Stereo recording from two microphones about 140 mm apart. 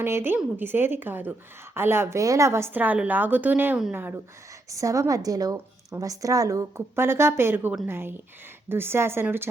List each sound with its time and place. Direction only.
0.0 s a woman's voice: 15° right (ahead or behind)